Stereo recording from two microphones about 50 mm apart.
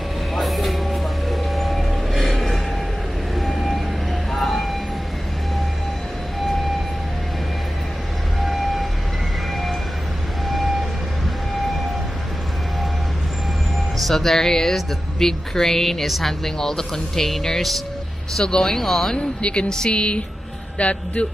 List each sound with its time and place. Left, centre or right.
0.4 s vehicle: centre
8.4 s vehicle: centre
13.9 s speech: centre
18.4 s speech: centre
19.1 s speech: left